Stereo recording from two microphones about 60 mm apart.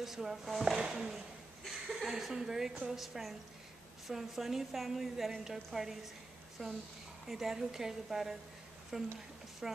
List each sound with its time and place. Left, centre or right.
0.0 s speech: centre
6.6 s speech: centre
7.2 s speech: centre